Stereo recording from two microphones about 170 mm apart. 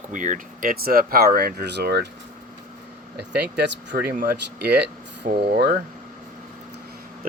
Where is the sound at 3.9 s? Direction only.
60° right (ahead or behind); by 4.8 s 80° right.